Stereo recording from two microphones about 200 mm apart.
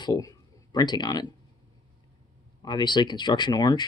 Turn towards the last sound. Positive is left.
turn(degrees=20)  # may be behind; listen again after turning